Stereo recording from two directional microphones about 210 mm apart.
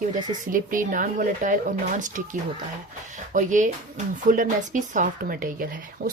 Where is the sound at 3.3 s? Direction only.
35° right (ahead or behind).